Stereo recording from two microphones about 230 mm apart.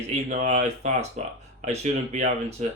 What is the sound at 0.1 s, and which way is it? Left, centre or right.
Speech, right.